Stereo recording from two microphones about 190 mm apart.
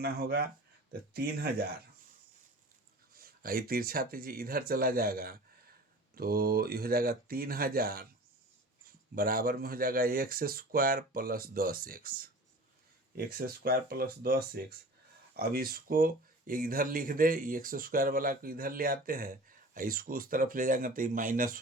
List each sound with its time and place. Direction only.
0.0 s speech: 55° right (ahead or behind)
3.2 s speech: 50° right (ahead or behind)
9.1 s speech: 50° right (ahead or behind)